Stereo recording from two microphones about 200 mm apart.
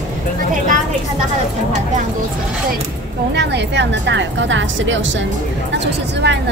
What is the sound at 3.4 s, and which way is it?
A woman's voice, 60° right (ahead or behind).